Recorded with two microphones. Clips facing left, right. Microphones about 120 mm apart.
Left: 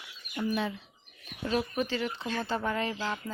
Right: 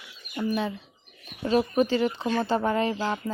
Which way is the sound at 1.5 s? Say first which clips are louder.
Right 8 dB; 35° right (ahead or behind).